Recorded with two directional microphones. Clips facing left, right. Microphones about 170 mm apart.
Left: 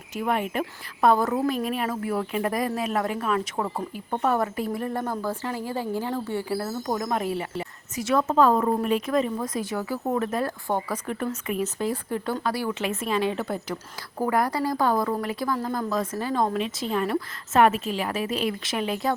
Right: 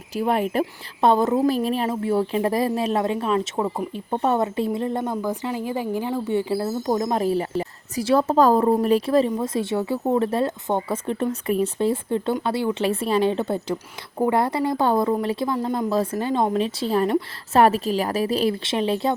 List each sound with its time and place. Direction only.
0.1 s a woman's voice: 35° right (ahead or behind)
1.0 s a woman's voice: 25° right (ahead or behind)